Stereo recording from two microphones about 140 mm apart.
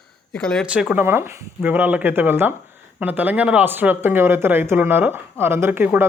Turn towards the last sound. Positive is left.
turn(degrees=-15)  # may be behind; listen again after turning